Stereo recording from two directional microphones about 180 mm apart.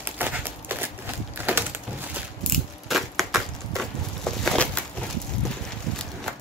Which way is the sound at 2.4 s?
Centre (ahead or behind).